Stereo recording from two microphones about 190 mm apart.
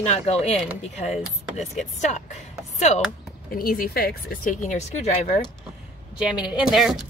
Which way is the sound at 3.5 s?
50° left (ahead or behind).